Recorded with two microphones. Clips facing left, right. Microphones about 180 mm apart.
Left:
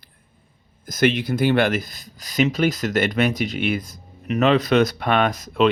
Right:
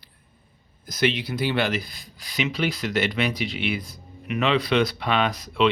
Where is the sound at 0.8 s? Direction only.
50° left (ahead or behind).